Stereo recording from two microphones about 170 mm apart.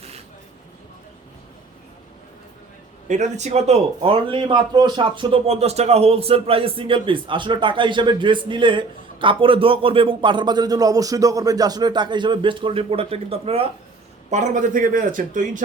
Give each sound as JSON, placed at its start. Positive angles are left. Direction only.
{"t": 3.1, "sound": "speech", "side_deg": -45}
{"t": 14.3, "sound": "speech", "side_deg": -45}